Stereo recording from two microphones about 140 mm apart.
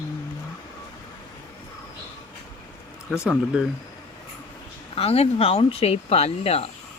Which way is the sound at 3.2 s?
5° right (ahead or behind).